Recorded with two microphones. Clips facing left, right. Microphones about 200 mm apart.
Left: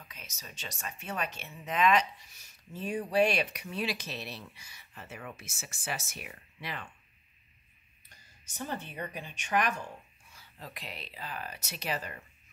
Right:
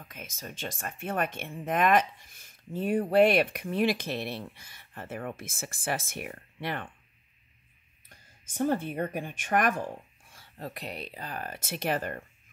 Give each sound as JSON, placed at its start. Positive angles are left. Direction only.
{"t": 0.0, "sound": "speech", "side_deg": -50}
{"t": 8.5, "sound": "speech", "side_deg": -50}